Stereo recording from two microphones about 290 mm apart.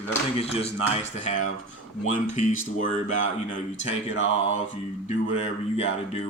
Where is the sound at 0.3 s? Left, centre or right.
Left.